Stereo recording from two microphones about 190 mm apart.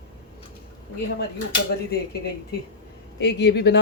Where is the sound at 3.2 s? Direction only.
60° left (ahead or behind).